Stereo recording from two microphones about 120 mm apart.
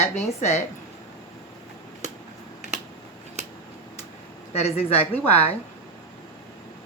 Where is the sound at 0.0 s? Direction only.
65° left (ahead or behind).